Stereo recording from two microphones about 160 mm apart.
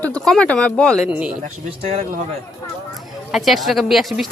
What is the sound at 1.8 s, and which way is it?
Speech, 40° right (ahead or behind).